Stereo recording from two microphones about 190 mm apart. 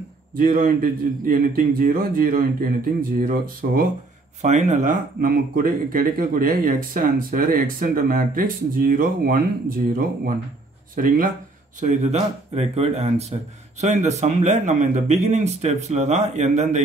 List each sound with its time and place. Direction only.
0.4 s speech: 45° right (ahead or behind)
11.8 s a man's voice: 40° right (ahead or behind)